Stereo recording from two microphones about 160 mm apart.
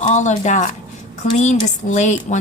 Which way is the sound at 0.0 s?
50° left (ahead or behind).